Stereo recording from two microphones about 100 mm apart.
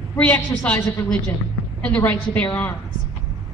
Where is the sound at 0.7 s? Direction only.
30° left (ahead or behind).